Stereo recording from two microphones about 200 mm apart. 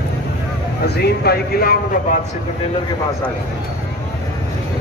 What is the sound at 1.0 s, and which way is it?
Speech, 50° left (ahead or behind).